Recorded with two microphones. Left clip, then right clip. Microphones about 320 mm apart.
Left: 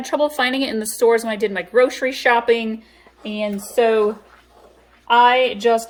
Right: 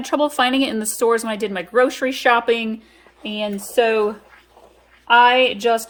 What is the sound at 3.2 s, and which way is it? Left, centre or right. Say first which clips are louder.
Speech: even; right.